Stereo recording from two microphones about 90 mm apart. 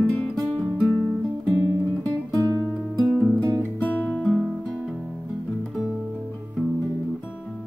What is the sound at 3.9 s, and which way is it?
Music, 20° left (ahead or behind).